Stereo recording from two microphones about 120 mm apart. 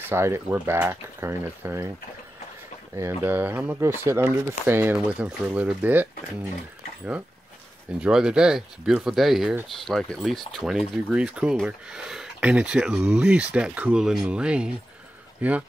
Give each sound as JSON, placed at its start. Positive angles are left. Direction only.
{"t": 0.1, "sound": "speech", "side_deg": -20}
{"t": 3.0, "sound": "speech", "side_deg": -20}
{"t": 8.0, "sound": "speech", "side_deg": -5}